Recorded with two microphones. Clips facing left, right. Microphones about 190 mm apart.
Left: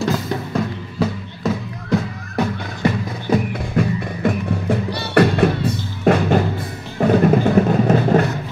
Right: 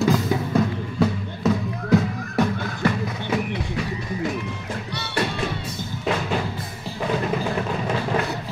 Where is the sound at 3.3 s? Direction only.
50° left (ahead or behind).